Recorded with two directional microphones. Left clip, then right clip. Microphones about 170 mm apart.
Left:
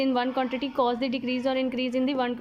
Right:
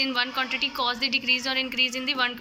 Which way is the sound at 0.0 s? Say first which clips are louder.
Even; 40° left (ahead or behind).